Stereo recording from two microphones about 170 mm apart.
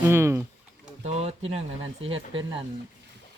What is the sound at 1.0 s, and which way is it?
Speech, 40° right (ahead or behind).